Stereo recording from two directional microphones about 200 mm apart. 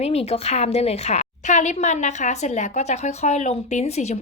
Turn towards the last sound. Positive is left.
turn(degrees=35)  # may be behind; listen again after turning